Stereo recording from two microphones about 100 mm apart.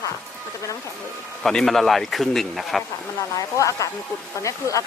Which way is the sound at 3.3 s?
35° left (ahead or behind).